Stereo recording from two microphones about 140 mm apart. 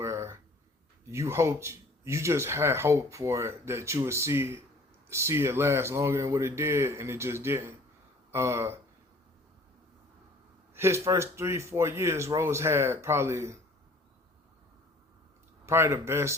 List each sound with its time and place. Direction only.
0.0 s a sound: 20° right (ahead or behind)
1.0 s speech: 20° right (ahead or behind)
10.8 s speech: 20° right (ahead or behind)
15.6 s speech: 20° right (ahead or behind)